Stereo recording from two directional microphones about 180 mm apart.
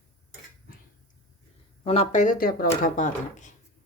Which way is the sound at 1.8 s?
35° left (ahead or behind).